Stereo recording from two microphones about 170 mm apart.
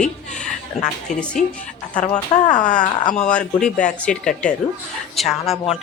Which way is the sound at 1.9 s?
45° left (ahead or behind).